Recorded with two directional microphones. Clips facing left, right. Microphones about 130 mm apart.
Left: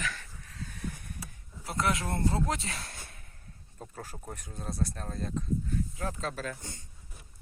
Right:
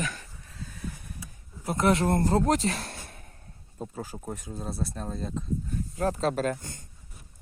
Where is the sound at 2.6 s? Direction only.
35° right (ahead or behind).